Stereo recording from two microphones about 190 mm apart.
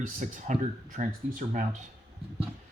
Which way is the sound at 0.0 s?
40° right (ahead or behind).